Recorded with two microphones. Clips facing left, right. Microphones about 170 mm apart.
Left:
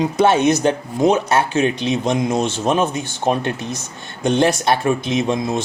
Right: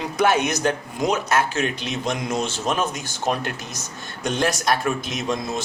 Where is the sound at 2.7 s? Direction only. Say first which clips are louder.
Left 6 dB; 30° left (ahead or behind).